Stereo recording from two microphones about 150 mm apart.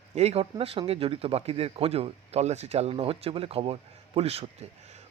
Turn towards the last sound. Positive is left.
turn(degrees=-40)  # may be behind; listen again after turning